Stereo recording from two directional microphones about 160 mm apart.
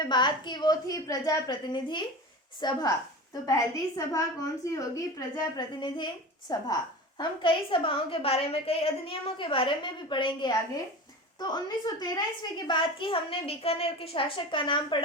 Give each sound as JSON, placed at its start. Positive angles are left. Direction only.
{"t": 0.0, "sound": "a woman's voice", "side_deg": 30}